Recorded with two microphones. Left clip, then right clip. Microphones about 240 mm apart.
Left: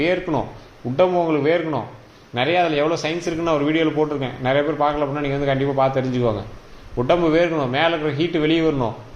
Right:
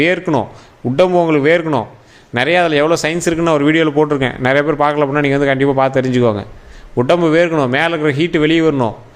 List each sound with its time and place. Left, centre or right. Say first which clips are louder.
0.0 s a man's voice: right 6 dB; right